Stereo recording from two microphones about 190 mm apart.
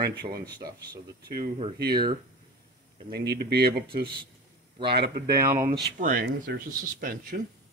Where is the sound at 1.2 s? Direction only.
50° right (ahead or behind).